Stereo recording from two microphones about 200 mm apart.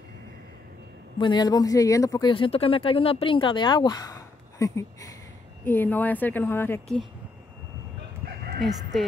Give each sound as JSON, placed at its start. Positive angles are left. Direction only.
{"t": 1.1, "sound": "a woman's voice", "side_deg": 20}
{"t": 8.5, "sound": "speech", "side_deg": 0}